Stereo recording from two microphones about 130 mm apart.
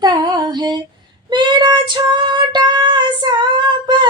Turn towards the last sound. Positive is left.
turn(degrees=-35)  # may be behind; listen again after turning